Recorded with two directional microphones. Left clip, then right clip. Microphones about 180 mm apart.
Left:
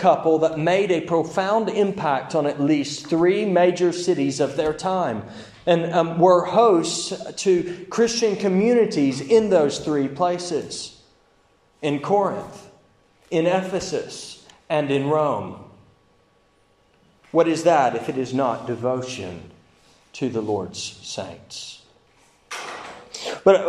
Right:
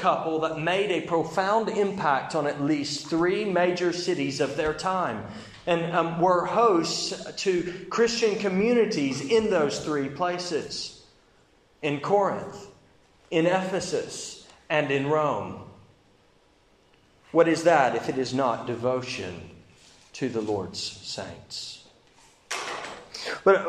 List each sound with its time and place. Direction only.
0.0 s a man's voice: 30° left (ahead or behind); by 15.3 s 15° left (ahead or behind)
17.3 s a man's voice: 15° left (ahead or behind)
23.1 s a sound: 15° left (ahead or behind)